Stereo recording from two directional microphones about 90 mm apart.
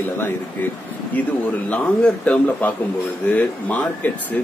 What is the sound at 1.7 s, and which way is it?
A man's voice, 15° left (ahead or behind).